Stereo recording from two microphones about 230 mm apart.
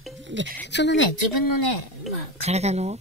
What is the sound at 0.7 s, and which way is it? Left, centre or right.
Speech, left.